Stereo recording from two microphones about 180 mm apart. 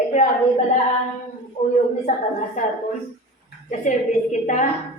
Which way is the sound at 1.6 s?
35° left (ahead or behind).